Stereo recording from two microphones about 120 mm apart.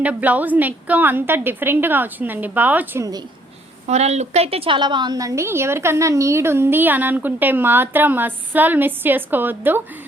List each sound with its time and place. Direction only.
0.0 s a woman's voice: 10° right (ahead or behind)
3.0 s a woman's voice: 35° right (ahead or behind)
3.8 s a woman's voice: 65° right (ahead or behind); by 9.8 s 15° right (ahead or behind)